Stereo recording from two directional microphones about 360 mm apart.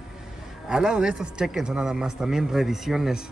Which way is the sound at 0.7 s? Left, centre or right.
Centre.